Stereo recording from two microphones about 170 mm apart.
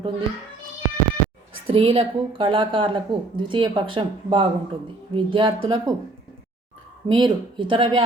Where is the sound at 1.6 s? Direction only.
35° right (ahead or behind).